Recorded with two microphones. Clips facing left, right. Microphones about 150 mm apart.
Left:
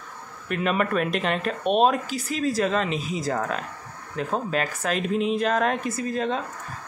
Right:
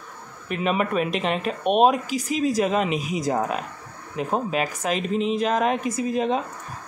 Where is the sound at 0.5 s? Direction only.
5° right (ahead or behind).